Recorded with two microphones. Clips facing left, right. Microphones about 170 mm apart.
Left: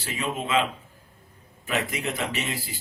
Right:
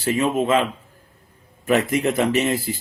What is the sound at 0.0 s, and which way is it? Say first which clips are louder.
Speech: right 10 dB; 45° right (ahead or behind).